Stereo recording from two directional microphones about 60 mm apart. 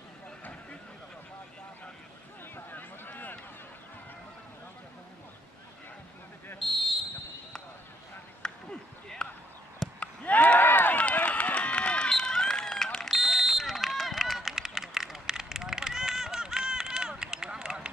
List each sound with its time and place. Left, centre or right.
0.4 s vehicle: left
2.5 s a sound: left
6.6 s basketball bounce: centre
8.4 s a sound: centre
9.2 s basketball bounce: centre
9.9 s run: left; by 17.9 s centre